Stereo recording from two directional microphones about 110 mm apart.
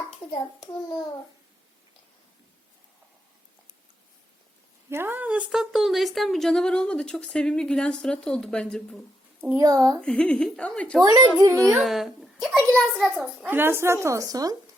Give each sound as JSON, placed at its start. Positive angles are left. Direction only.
{"t": 4.9, "sound": "speech", "side_deg": -20}
{"t": 9.6, "sound": "speech", "side_deg": -35}
{"t": 10.0, "sound": "speech", "side_deg": 10}
{"t": 11.0, "sound": "speech", "side_deg": -30}
{"t": 11.8, "sound": "a child's voice", "side_deg": 0}
{"t": 13.5, "sound": "a woman's voice", "side_deg": -20}